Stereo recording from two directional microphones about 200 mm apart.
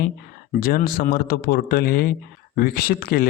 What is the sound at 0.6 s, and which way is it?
Speech, 45° left (ahead or behind).